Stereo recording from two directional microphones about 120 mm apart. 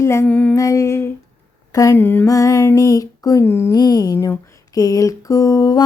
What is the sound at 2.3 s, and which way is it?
Music, 30° left (ahead or behind).